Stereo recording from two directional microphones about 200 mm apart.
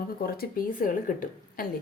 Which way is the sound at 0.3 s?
45° left (ahead or behind).